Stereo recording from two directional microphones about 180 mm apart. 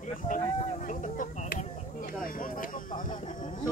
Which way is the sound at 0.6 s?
45° left (ahead or behind).